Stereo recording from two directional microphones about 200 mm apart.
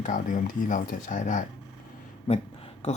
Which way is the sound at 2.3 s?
30° left (ahead or behind).